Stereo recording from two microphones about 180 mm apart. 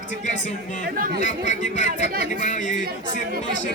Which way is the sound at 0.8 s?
55° right (ahead or behind).